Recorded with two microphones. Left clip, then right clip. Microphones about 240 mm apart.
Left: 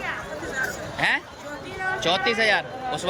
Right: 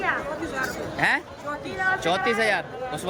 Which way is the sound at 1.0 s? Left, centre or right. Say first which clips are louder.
Even; centre.